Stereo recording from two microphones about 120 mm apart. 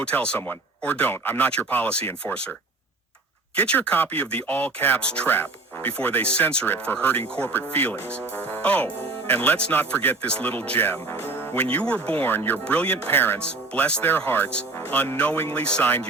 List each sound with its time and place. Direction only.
0.0 s speech: 10° left (ahead or behind)
3.5 s speech: 15° left (ahead or behind)